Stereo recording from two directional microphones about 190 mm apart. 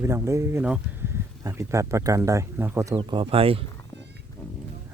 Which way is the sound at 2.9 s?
25° right (ahead or behind).